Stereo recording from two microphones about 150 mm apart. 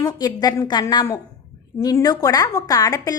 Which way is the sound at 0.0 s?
25° left (ahead or behind).